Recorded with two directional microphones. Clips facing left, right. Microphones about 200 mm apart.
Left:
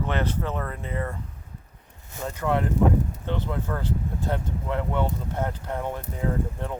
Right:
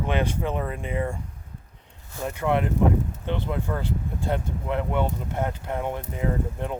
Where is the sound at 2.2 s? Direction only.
15° right (ahead or behind).